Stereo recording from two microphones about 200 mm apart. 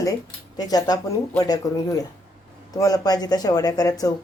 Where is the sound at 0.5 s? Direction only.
20° left (ahead or behind).